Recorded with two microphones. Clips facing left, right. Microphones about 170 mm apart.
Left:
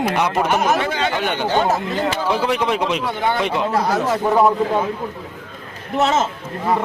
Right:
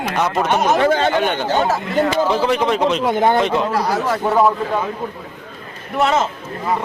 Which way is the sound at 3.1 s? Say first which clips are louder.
Right 6 dB; 45° right (ahead or behind).